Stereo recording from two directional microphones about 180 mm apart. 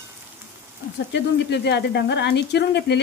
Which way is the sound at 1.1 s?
70° left (ahead or behind).